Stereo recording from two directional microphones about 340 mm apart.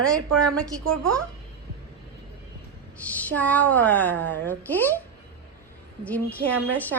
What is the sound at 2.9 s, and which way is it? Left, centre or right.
A woman's voice, centre.